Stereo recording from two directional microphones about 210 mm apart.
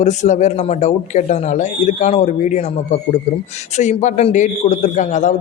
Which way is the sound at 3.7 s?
35° left (ahead or behind).